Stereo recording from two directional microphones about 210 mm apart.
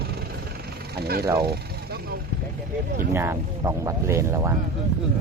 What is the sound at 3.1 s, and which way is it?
Speech, 10° right (ahead or behind).